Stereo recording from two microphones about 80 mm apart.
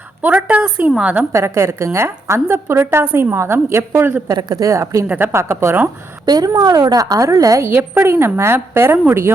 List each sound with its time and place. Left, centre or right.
0.2 s a woman's voice: centre
1.3 s a woman's voice: right
4.4 s a woman's voice: right
5.0 s a woman's voice: right
6.2 s a woman's voice: right
7.6 s a woman's voice: right